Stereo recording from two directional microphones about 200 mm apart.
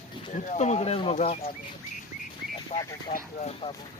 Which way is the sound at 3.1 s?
30° left (ahead or behind).